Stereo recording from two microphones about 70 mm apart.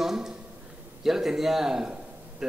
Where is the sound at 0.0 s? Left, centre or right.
Centre.